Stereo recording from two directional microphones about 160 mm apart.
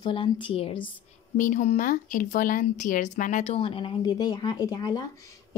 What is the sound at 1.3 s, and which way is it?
Speech, 55° left (ahead or behind).